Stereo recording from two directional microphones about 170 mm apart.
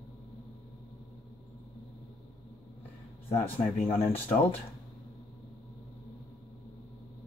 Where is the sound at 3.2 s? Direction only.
35° left (ahead or behind).